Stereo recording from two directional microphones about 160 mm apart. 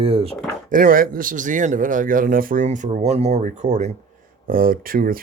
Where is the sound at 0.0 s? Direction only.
35° right (ahead or behind).